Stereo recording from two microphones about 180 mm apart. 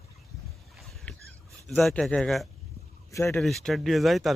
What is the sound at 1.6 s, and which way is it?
Speech, centre (ahead or behind).